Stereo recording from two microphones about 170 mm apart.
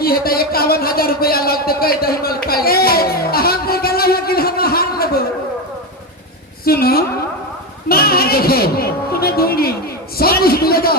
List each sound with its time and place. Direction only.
0.0 s a man's voice: 65° left (ahead or behind)
6.7 s a woman's voice: 65° left (ahead or behind)